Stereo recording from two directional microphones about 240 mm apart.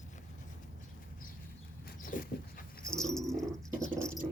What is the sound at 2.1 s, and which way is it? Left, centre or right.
Dog, left.